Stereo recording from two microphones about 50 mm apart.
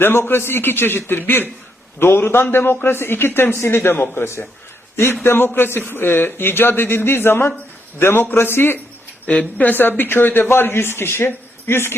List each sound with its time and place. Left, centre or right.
0.0 s a man's voice: left
2.0 s a man's voice: left
5.2 s a man's voice: left
9.2 s speech: left
9.6 s a man's voice: left